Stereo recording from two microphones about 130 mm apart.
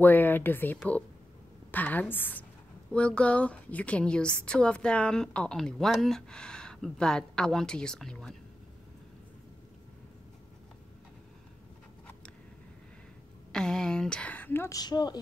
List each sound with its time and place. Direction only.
0.0 s a woman's voice: 15° left (ahead or behind)
13.5 s a woman's voice: 5° left (ahead or behind)
14.8 s speech: 30° left (ahead or behind)